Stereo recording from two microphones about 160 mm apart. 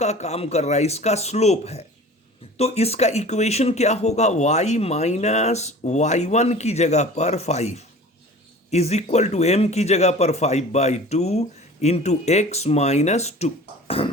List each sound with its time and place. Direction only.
0.0 s a man's voice: 45° left (ahead or behind)